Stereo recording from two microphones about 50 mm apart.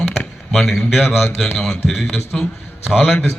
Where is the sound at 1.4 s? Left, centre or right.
Centre.